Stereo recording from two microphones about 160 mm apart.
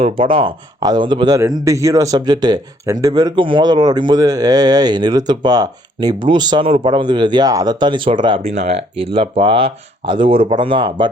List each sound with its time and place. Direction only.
0.0 s speech: 35° right (ahead or behind)